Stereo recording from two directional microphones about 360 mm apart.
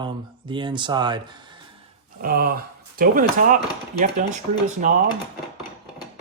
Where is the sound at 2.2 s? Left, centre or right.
Right.